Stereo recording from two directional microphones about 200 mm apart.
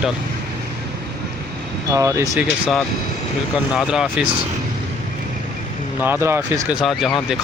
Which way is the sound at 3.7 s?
5° right (ahead or behind).